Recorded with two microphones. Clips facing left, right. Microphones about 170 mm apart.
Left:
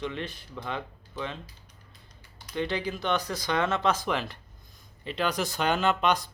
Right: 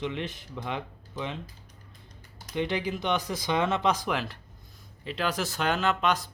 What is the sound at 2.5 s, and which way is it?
Speech, 15° right (ahead or behind).